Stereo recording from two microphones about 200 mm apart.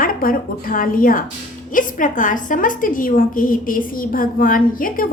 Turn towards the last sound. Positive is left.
turn(degrees=45)  # may be behind; listen again after turning